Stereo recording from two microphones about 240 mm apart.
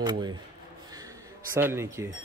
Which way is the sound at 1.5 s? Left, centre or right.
Centre.